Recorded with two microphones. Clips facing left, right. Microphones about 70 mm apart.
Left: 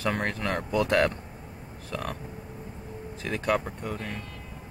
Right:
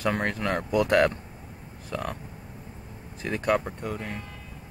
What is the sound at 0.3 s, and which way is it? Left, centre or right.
Speech, centre.